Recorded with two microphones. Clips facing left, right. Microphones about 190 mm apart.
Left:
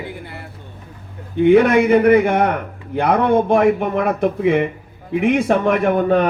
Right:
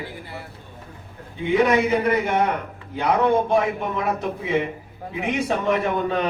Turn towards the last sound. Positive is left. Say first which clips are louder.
# left 7 dB
turn(degrees=55)  # may be behind; listen again after turning